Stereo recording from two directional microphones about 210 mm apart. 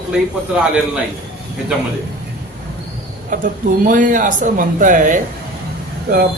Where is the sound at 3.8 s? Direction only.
40° right (ahead or behind).